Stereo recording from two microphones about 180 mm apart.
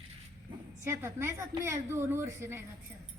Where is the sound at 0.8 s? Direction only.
15° right (ahead or behind).